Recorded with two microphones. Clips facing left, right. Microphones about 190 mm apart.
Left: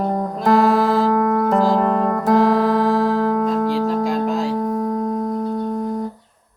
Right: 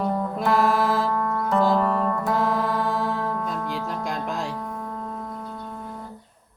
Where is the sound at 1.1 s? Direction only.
45° left (ahead or behind).